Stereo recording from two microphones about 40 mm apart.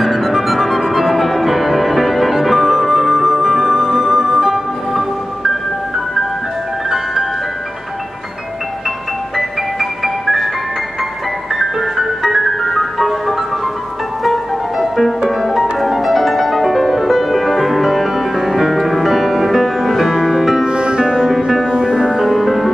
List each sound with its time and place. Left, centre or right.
0.0 s music: centre
9.4 s music: centre
11.5 s music: centre
14.8 s music: centre
20.6 s music: right
21.3 s music: centre
21.7 s music: centre